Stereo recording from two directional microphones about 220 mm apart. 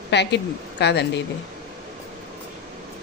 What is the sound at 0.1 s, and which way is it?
A woman's voice, 50° left (ahead or behind).